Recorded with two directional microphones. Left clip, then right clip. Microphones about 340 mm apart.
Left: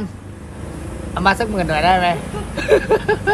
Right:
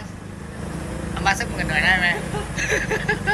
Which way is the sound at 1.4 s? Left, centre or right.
Centre.